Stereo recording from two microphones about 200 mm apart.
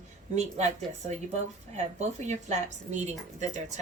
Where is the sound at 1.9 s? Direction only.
35° right (ahead or behind).